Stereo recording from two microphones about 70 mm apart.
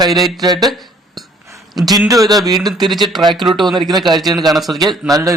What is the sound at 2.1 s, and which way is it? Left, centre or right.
Speech, right.